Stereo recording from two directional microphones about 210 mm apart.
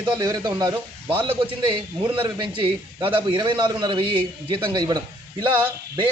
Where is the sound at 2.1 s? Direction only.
20° right (ahead or behind).